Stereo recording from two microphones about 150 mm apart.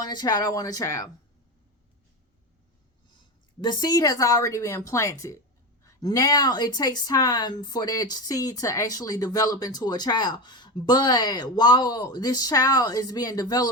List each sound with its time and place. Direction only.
0.0 s speech: 25° left (ahead or behind)
3.6 s speech: 30° left (ahead or behind)